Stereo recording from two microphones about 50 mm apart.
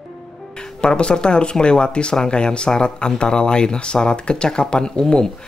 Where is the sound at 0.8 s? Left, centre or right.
Centre.